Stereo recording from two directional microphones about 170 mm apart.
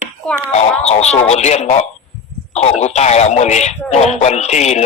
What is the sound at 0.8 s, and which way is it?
Speech, 40° left (ahead or behind).